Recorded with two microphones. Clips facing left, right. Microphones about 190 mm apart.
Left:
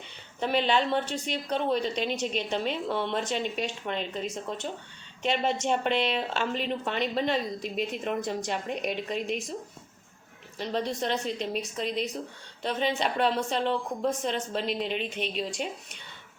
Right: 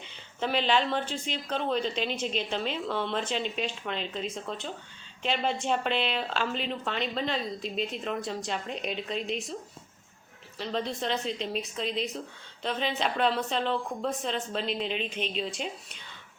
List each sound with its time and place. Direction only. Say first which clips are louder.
0.3 s a woman's voice: left 1 dB; 15° left (ahead or behind)
10.6 s a woman's voice: left 2 dB; 15° left (ahead or behind)